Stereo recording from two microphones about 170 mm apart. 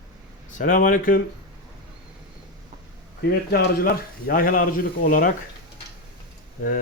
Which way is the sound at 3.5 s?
65° left (ahead or behind).